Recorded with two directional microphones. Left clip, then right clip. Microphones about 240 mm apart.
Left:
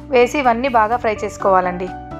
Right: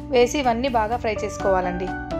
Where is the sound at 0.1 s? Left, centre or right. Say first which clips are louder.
Left 5 dB; centre.